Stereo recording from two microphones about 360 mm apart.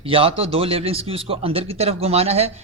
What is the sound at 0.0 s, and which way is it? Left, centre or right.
A man's voice, centre.